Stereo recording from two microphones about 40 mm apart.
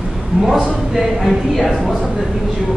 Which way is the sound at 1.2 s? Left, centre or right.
Centre.